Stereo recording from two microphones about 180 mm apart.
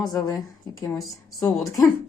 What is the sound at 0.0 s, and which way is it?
A woman's voice, 20° left (ahead or behind).